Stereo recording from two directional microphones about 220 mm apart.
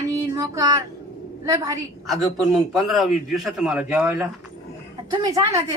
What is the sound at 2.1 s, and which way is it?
A man's voice, centre (ahead or behind).